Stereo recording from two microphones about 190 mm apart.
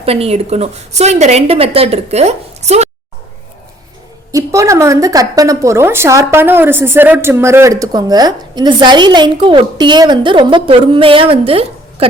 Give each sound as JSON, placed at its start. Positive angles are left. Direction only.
{"t": 0.0, "sound": "a woman's voice", "side_deg": -30}
{"t": 4.3, "sound": "a woman's voice", "side_deg": -15}